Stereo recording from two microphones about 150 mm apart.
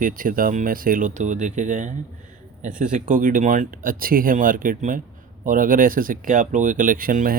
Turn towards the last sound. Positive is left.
turn(degrees=-70)  # may be behind; listen again after turning